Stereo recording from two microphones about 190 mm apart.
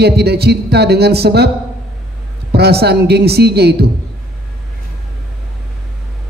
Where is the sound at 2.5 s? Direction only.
60° right (ahead or behind).